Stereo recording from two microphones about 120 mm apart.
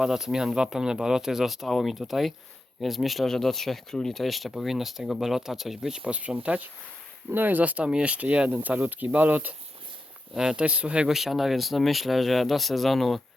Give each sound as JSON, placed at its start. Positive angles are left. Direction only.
{"t": 0.0, "sound": "speech", "side_deg": -5}